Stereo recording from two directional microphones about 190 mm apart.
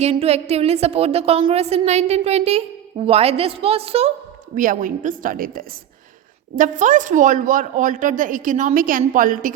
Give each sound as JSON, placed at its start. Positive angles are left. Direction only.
{"t": 0.0, "sound": "a woman's voice", "side_deg": -35}
{"t": 4.5, "sound": "speech", "side_deg": -45}